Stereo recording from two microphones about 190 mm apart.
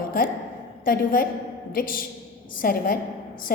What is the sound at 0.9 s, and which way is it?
A woman's voice, 45° left (ahead or behind).